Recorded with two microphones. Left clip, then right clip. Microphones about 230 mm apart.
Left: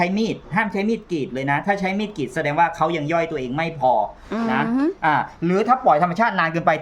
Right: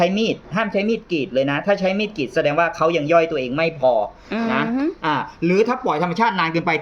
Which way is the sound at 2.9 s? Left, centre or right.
Left.